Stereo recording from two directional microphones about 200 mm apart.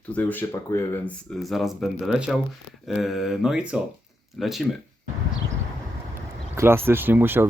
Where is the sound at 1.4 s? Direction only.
Centre (ahead or behind).